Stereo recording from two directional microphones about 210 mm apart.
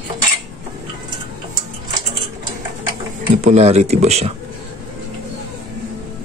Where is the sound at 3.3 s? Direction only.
30° right (ahead or behind).